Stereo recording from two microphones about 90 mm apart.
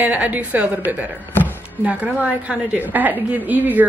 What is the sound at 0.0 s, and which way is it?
A woman's voice, 20° right (ahead or behind).